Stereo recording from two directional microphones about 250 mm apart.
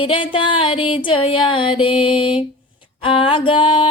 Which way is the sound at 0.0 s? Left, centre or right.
Left.